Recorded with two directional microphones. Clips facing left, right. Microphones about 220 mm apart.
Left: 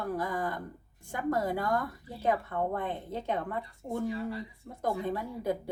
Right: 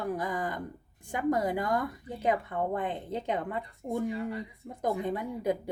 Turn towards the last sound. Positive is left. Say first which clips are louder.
# right 2 dB
turn(degrees=-15)  # may be behind; listen again after turning